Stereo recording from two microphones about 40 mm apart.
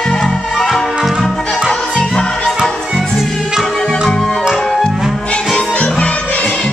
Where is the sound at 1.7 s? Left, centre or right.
Left.